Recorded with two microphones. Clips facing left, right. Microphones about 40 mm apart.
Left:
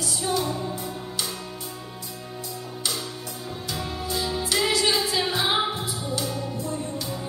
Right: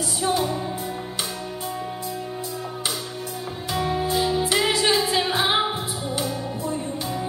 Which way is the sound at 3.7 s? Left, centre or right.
Right.